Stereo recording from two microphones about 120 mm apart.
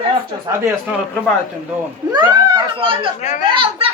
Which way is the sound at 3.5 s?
45° right (ahead or behind).